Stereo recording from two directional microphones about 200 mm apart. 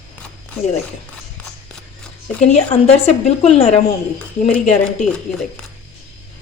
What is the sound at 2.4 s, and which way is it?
A woman's voice, 35° left (ahead or behind).